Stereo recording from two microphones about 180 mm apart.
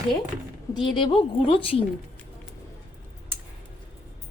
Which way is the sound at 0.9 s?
30° left (ahead or behind).